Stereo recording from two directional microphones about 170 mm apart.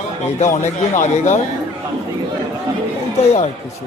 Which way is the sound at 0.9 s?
45° left (ahead or behind).